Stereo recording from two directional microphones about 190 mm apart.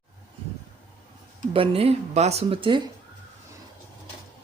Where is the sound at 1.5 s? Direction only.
30° right (ahead or behind).